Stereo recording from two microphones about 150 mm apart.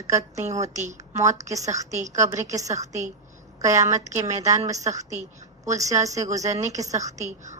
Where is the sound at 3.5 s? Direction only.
20° right (ahead or behind).